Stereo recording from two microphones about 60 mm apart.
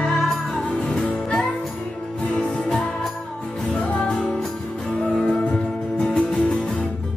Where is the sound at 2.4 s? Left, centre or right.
Centre.